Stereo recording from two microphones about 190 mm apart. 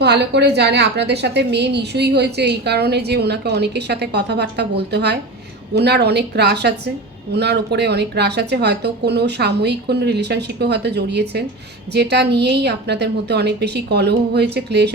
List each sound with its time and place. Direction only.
0.0 s a woman's voice: 60° right (ahead or behind)